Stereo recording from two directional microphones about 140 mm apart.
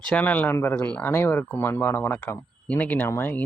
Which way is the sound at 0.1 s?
10° left (ahead or behind).